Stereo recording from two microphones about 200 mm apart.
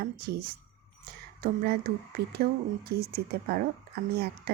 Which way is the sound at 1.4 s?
50° right (ahead or behind).